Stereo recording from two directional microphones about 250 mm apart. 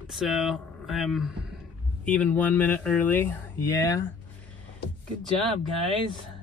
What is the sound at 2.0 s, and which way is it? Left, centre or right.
Speech, centre.